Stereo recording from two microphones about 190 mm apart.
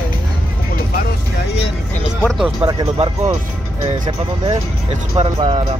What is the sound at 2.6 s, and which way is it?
Speech, 20° right (ahead or behind).